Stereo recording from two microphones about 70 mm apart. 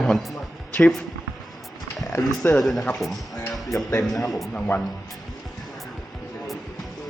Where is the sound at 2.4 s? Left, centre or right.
Left.